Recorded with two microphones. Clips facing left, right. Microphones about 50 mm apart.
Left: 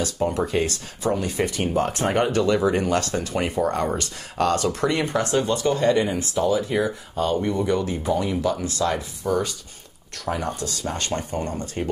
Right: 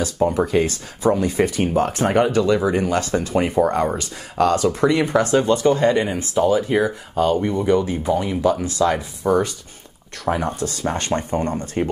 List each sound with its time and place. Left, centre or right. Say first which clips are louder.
0.0 s speech: right 4 dB; centre
5.1 s speech: right 5 dB; right
7.3 s speech: right 4 dB; right